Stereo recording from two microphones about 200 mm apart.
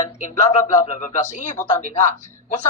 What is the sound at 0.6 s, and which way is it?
Speech, 35° left (ahead or behind).